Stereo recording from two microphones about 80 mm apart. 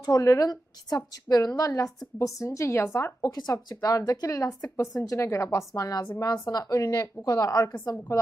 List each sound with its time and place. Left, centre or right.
0.1 s a woman's voice: left
3.3 s a woman's voice: left